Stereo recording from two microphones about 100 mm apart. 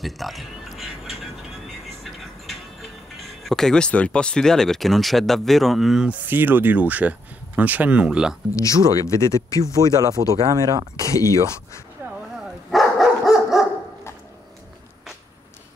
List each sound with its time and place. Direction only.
0.0 s a sound: centre (ahead or behind)
2.0 s speech: centre (ahead or behind)
6.2 s speech: 20° right (ahead or behind)
8.5 s speech: 30° left (ahead or behind)
9.8 s speech: 35° right (ahead or behind)
12.7 s dog: centre (ahead or behind)